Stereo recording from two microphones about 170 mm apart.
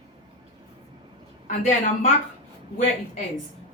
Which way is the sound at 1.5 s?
45° left (ahead or behind).